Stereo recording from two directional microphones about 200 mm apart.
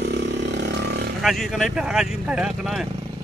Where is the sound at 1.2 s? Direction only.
Centre (ahead or behind).